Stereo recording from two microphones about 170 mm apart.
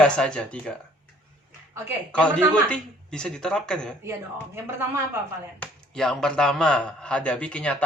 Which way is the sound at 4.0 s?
15° right (ahead or behind).